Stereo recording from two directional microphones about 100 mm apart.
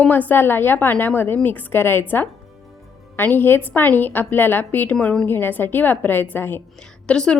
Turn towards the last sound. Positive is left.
turn(degrees=10)  # may be behind; listen again after turning